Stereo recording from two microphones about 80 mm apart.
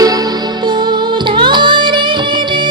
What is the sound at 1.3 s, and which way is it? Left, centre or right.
Music, right.